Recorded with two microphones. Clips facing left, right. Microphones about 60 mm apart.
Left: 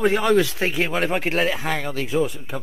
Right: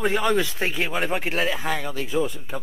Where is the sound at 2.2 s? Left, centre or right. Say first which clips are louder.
Left 2 dB; left.